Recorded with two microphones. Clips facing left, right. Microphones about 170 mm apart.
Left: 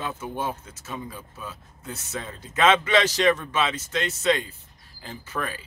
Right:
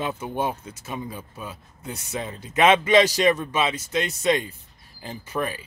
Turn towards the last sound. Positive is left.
turn(degrees=-15)  # may be behind; listen again after turning